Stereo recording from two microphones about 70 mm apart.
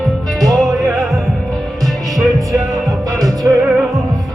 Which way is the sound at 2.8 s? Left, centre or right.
Right.